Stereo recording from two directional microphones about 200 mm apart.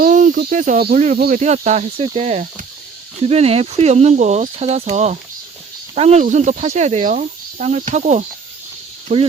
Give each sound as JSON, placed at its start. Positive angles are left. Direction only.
{"t": 0.0, "sound": "speech", "side_deg": -40}